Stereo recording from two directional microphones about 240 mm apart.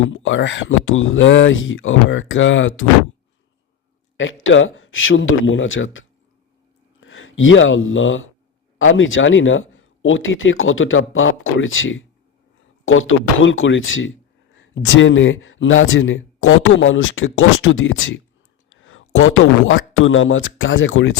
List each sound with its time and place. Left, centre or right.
0.1 s speech: left
4.2 s speech: left